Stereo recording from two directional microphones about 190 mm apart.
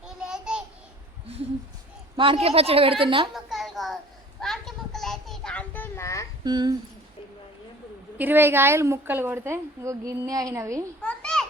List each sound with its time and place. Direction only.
0.0 s babbling: 5° right (ahead or behind)
2.1 s a woman's voice: 30° right (ahead or behind)
3.3 s a sound: centre (ahead or behind); by 6.2 s 15° left (ahead or behind)
6.4 s speech: 20° right (ahead or behind)
8.2 s a woman's voice: 10° right (ahead or behind)
11.0 s children playing: 5° left (ahead or behind)